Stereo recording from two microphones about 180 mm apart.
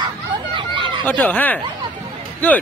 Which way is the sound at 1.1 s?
10° left (ahead or behind).